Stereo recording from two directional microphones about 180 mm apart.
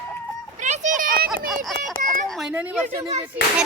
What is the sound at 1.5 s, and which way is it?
A woman's voice, centre (ahead or behind).